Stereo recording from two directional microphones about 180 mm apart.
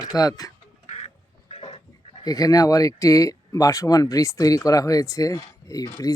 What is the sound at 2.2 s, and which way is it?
Speech, 20° left (ahead or behind).